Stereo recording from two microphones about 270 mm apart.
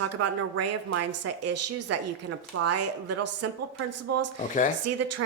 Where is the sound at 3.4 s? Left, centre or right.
Right.